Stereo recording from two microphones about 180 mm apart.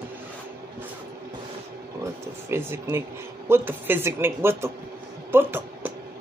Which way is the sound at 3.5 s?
10° right (ahead or behind).